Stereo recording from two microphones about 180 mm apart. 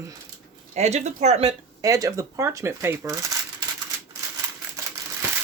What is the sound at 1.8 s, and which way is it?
Speech, 20° right (ahead or behind).